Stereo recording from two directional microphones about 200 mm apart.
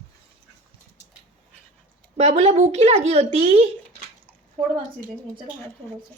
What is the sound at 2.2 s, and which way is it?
Speech, 35° right (ahead or behind).